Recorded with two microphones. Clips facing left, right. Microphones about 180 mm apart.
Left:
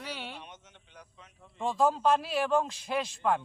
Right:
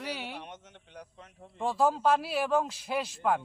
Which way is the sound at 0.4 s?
60° right (ahead or behind).